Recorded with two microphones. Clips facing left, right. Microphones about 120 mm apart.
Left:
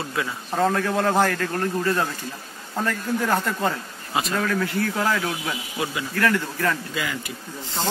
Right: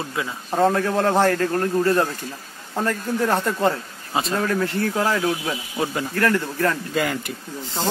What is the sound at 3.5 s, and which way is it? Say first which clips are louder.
Speech: right 4 dB; 30° right (ahead or behind).